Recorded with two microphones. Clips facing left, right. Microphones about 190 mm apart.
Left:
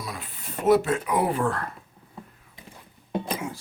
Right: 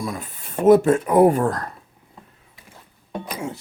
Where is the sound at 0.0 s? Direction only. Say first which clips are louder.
Right 7 dB; 45° right (ahead or behind).